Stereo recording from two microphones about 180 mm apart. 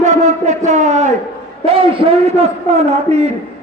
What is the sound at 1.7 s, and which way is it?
A man's voice, 30° right (ahead or behind).